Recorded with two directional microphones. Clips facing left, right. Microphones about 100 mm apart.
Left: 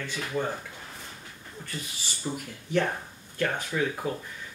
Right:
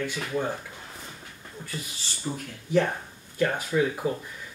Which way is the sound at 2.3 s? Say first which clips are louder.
Even; 10° left (ahead or behind).